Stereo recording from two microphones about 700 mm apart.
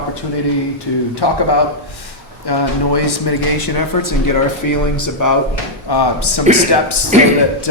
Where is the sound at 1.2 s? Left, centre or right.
Left.